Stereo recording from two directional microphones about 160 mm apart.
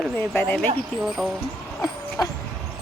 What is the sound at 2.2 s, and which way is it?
Vehicle, 25° left (ahead or behind).